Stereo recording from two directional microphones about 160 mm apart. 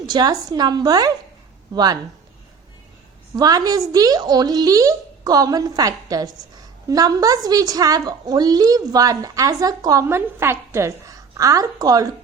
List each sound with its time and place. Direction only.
0.0 s a woman's voice: 25° right (ahead or behind)
3.3 s a woman's voice: 25° right (ahead or behind)